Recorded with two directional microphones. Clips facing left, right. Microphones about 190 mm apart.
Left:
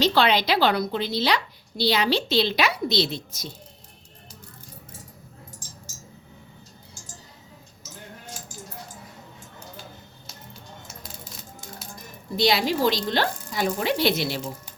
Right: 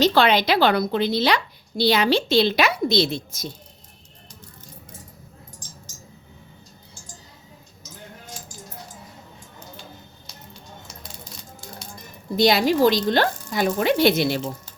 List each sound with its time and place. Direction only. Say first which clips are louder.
0.0 s a woman's voice: right 3 dB; 50° right (ahead or behind)
12.4 s a woman's voice: right 5 dB; 45° right (ahead or behind)